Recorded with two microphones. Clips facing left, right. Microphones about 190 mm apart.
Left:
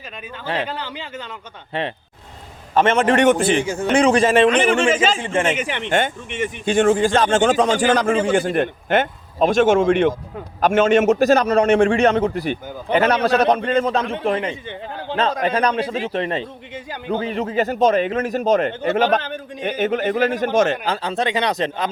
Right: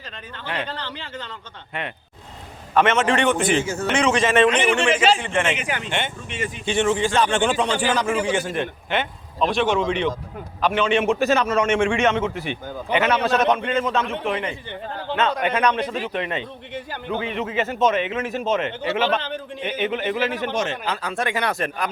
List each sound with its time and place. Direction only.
0.4 s a man's voice: 30° left (ahead or behind)
0.7 s speech: 10° left (ahead or behind)
3.1 s a man's voice: 45° left (ahead or behind)
3.4 s speech: 15° left (ahead or behind)
3.8 s a man's voice: 35° left (ahead or behind)
20.8 s speech: 30° left (ahead or behind)